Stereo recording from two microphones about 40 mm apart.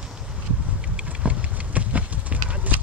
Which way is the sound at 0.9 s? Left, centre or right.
Right.